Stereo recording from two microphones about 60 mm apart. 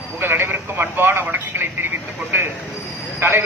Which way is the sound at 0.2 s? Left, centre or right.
Right.